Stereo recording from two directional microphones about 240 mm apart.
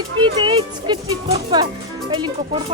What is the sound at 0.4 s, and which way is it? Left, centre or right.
Speech, right.